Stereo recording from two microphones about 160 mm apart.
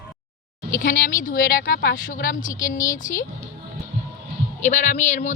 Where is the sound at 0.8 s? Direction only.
55° left (ahead or behind).